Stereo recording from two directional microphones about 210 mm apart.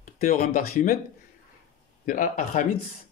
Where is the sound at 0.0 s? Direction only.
40° left (ahead or behind).